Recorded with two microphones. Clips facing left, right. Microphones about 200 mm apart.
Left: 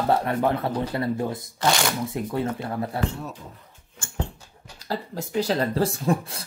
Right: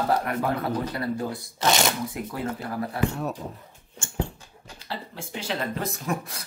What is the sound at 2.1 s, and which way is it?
Speech, 25° left (ahead or behind).